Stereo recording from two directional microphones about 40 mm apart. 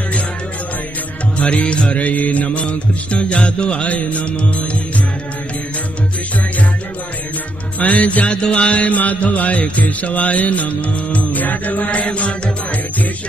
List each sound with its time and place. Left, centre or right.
1.4 s music: left
7.8 s music: left